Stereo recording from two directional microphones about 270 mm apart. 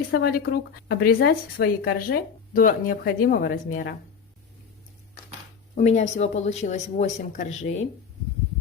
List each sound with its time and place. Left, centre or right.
0.1 s speech: left
5.7 s speech: left